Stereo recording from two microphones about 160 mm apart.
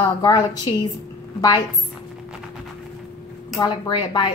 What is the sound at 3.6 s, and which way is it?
Speech, 25° left (ahead or behind).